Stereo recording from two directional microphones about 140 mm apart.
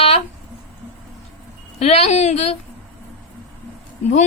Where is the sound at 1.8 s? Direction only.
50° left (ahead or behind).